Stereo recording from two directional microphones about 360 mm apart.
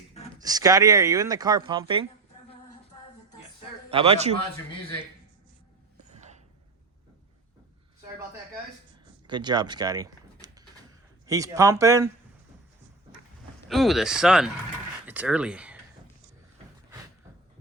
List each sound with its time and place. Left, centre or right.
0.3 s speech: centre
3.8 s speech: centre
6.1 s a sound: centre
9.2 s speech: centre
13.7 s speech: centre